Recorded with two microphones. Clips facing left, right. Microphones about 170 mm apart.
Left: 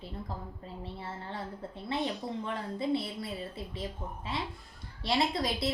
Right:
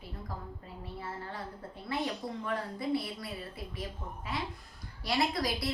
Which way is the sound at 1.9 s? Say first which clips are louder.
Left 1 dB; 25° left (ahead or behind).